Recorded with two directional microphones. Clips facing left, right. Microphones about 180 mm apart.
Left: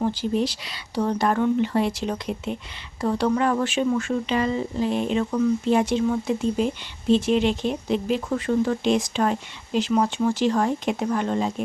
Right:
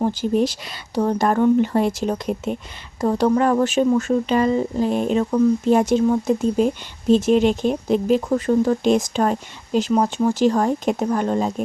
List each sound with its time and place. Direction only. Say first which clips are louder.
0.0 s speech: right 4 dB; 45° right (ahead or behind)